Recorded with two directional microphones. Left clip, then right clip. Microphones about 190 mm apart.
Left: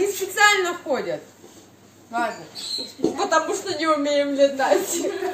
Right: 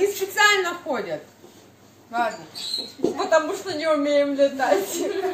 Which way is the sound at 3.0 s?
40° left (ahead or behind).